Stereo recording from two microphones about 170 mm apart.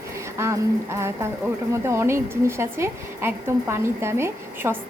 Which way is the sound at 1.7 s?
15° right (ahead or behind).